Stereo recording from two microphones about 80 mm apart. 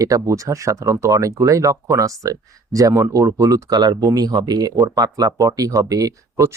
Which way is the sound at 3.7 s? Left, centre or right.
Right.